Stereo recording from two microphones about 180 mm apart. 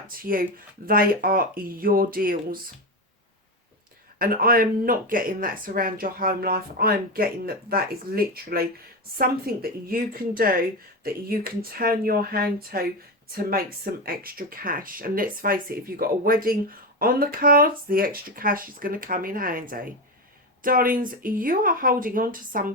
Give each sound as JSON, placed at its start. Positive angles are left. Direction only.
{"t": 0.2, "sound": "speech", "side_deg": -50}
{"t": 4.2, "sound": "a woman's voice", "side_deg": -55}